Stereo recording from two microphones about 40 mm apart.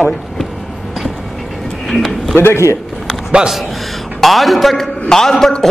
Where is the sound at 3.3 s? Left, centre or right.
Centre.